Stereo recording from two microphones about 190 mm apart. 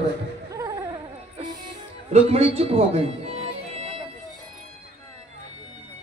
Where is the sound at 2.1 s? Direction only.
30° right (ahead or behind).